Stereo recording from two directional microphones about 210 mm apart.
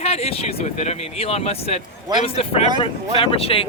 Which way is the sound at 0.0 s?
30° left (ahead or behind).